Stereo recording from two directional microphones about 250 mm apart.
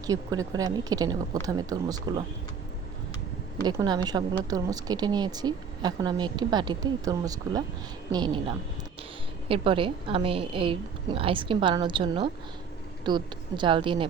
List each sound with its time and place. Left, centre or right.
0.1 s a woman's voice: centre
3.6 s a woman's voice: centre
9.5 s a woman's voice: right